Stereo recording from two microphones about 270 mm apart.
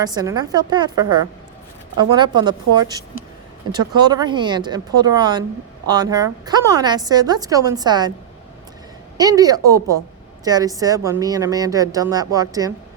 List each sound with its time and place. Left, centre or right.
0.0 s a woman's voice: centre
9.1 s a woman's voice: centre